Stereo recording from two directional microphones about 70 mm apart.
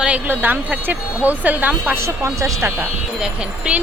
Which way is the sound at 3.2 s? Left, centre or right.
Centre.